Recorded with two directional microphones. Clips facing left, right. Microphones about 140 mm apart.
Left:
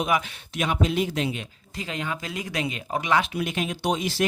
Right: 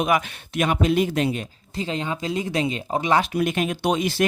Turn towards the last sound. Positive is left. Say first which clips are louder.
# right 4 dB
turn(degrees=-60)  # may be behind; listen again after turning